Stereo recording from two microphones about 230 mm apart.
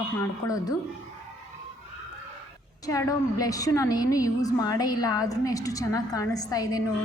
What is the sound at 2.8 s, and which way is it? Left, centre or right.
A woman's voice, centre.